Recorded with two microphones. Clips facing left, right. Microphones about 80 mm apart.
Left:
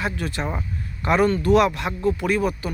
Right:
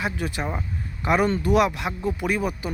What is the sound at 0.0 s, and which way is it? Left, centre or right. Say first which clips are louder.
Speech: left 1 dB; centre.